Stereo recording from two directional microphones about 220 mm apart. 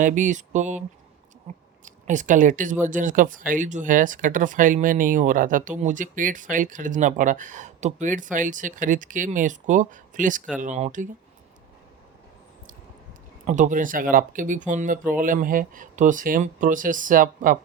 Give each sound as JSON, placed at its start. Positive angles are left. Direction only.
{"t": 0.0, "sound": "speech", "side_deg": -35}
{"t": 1.8, "sound": "speech", "side_deg": -35}
{"t": 13.5, "sound": "speech", "side_deg": -35}